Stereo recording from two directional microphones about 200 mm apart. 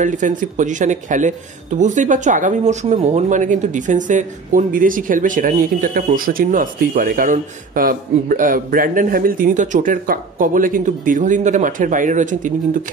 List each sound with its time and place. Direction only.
0.0 s a man's voice: 40° right (ahead or behind)